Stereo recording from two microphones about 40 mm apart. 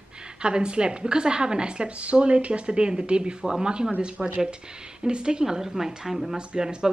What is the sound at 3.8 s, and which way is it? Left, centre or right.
Speech, right.